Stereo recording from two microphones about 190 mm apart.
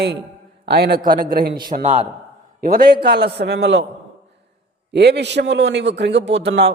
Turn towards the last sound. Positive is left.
turn(degrees=-65)  # may be behind; listen again after turning